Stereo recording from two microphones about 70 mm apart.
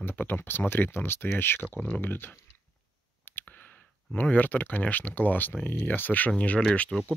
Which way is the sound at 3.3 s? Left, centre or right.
Left.